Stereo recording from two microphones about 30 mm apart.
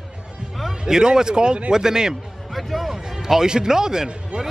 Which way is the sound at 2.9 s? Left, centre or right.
Centre.